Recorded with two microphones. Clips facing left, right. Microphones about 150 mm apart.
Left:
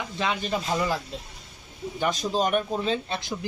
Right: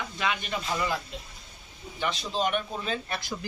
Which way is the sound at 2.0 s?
45° left (ahead or behind).